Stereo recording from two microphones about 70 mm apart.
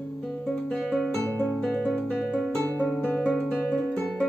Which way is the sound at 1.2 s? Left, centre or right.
Left.